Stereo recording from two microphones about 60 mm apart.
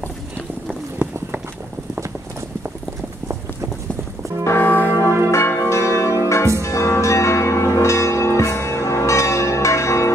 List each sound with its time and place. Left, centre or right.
4.5 s church bell: left
5.3 s change ringing: left
6.6 s church bell: left